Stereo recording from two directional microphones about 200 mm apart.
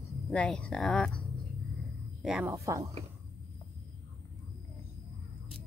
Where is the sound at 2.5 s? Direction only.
15° right (ahead or behind).